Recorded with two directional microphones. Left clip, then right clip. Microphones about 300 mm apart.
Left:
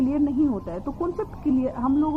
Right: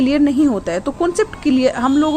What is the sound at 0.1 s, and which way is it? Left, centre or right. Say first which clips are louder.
A woman's voice: right 8 dB; right.